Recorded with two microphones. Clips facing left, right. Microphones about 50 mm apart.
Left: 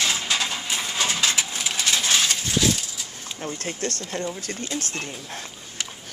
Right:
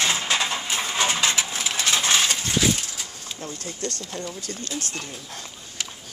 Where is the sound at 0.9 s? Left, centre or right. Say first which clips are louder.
Right 2 dB; right.